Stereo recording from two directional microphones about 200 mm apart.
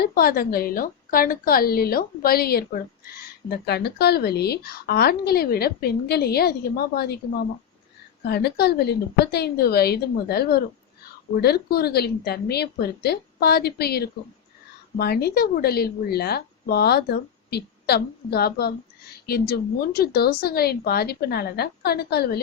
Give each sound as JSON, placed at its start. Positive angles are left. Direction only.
{"t": 0.0, "sound": "a woman's voice", "side_deg": 50}